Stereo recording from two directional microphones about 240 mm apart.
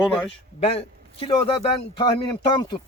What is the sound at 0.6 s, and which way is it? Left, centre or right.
A man's voice, left.